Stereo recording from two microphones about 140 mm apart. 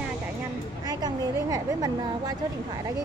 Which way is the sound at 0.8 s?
25° right (ahead or behind).